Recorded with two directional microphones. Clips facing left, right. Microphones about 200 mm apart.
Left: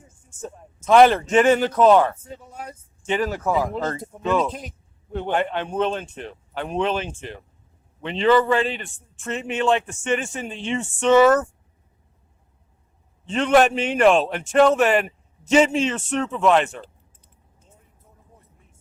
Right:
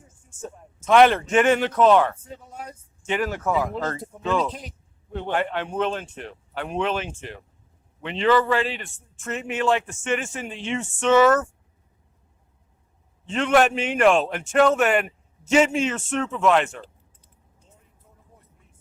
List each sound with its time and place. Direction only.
0.8 s speech: 35° left (ahead or behind)
3.1 s speech: 30° left (ahead or behind)
4.2 s speech: 15° left (ahead or behind)
5.3 s speech: 25° left (ahead or behind)
8.4 s speech: 20° left (ahead or behind)
11.1 s speech: 15° left (ahead or behind)
13.2 s speech: 35° left (ahead or behind)